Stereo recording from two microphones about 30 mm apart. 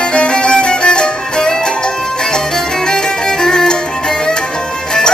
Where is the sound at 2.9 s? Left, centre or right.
Left.